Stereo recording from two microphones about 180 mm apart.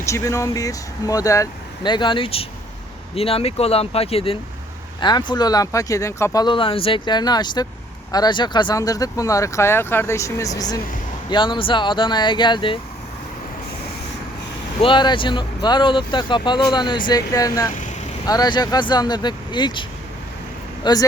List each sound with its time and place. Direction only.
0.0 s speech: 15° left (ahead or behind)
14.8 s speech: 25° left (ahead or behind)
20.8 s speech: 25° left (ahead or behind)